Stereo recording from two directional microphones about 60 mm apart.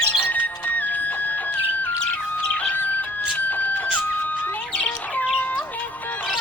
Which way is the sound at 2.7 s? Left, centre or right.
Left.